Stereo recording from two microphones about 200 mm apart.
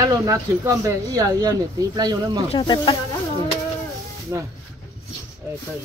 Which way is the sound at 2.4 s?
25° left (ahead or behind).